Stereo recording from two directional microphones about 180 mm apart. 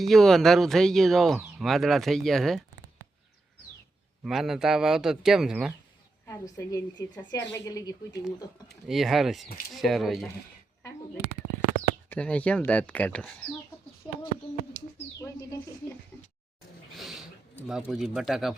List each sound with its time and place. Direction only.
0.0 s speech: centre (ahead or behind)
4.2 s speech: centre (ahead or behind)
6.2 s speech: 20° left (ahead or behind)
8.9 s speech: centre (ahead or behind)
12.0 s speech: 5° left (ahead or behind)
14.0 s bird: 25° left (ahead or behind)
14.8 s bird: 45° left (ahead or behind)
15.2 s bird: 15° left (ahead or behind)
17.0 s a sound: centre (ahead or behind)
17.7 s speech: 5° right (ahead or behind)